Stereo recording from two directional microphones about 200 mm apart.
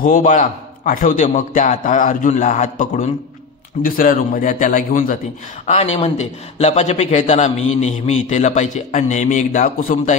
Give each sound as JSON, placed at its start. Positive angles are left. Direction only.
{"t": 0.0, "sound": "a man's voice", "side_deg": 40}